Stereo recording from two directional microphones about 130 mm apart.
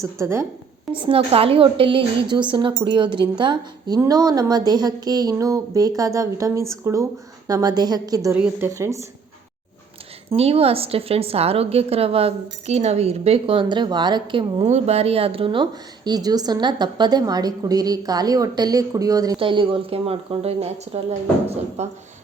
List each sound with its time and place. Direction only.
0.0 s speech: 20° right (ahead or behind)
1.0 s a woman's voice: 45° right (ahead or behind); by 8.3 s 30° right (ahead or behind)
8.4 s speech: 20° right (ahead or behind)
10.2 s a woman's voice: 50° right (ahead or behind)
14.7 s a woman's voice: 55° right (ahead or behind); by 19.4 s 30° right (ahead or behind)
19.4 s a woman's voice: 40° right (ahead or behind); by 21.9 s 60° right (ahead or behind)